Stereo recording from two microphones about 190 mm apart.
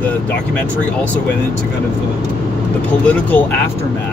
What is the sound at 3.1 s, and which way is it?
Speech, 10° left (ahead or behind).